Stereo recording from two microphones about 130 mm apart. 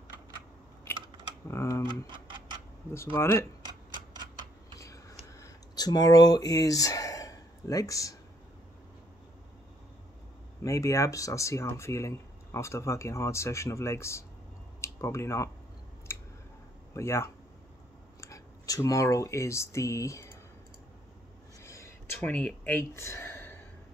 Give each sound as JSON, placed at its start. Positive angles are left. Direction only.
{"t": 0.9, "sound": "typing", "side_deg": 20}
{"t": 1.5, "sound": "speech", "side_deg": 20}
{"t": 3.2, "sound": "speech", "side_deg": 20}
{"t": 4.7, "sound": "a sound", "side_deg": 25}
{"t": 10.6, "sound": "speech", "side_deg": 25}
{"t": 16.1, "sound": "a sound", "side_deg": 20}
{"t": 16.9, "sound": "speech", "side_deg": 20}
{"t": 21.5, "sound": "a sound", "side_deg": 20}
{"t": 22.2, "sound": "speech", "side_deg": 10}